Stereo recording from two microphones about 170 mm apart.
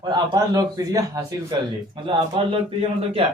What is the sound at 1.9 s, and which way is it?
A man's voice, 30° right (ahead or behind).